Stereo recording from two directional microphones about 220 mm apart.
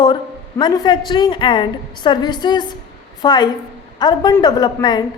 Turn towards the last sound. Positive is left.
turn(degrees=20)  # may be behind; listen again after turning